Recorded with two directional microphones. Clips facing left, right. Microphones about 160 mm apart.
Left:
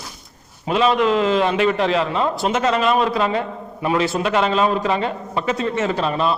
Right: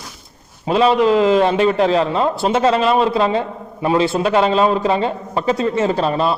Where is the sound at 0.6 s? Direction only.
30° right (ahead or behind).